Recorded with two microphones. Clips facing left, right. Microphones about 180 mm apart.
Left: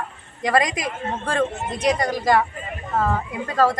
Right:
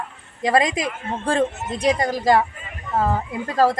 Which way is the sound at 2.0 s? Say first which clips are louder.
Right 2 dB; 30° right (ahead or behind).